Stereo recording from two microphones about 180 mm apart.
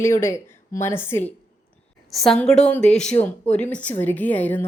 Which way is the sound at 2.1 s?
Centre (ahead or behind).